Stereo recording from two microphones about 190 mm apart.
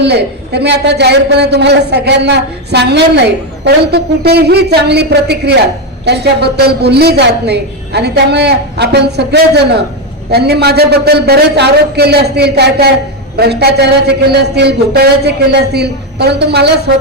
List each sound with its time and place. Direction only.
0.0 s a woman's voice: 60° right (ahead or behind)